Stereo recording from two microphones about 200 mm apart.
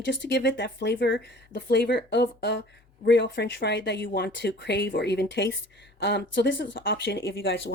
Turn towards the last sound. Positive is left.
turn(degrees=60)  # may be behind; listen again after turning